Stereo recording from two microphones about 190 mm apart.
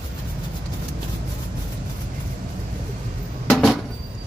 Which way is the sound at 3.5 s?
Centre (ahead or behind).